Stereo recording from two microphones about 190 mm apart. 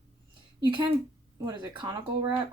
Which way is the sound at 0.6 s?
25° right (ahead or behind).